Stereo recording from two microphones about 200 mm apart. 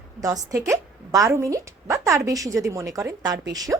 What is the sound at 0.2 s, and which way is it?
A woman's voice, 15° right (ahead or behind).